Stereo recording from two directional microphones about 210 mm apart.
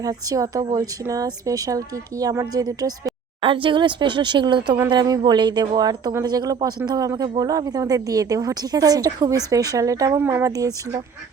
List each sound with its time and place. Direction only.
0.0 s speech: 15° right (ahead or behind)